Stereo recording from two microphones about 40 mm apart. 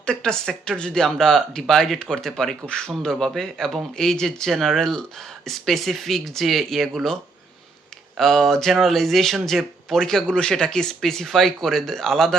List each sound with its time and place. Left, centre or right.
0.0 s speech: left
8.2 s speech: centre
10.2 s speech: left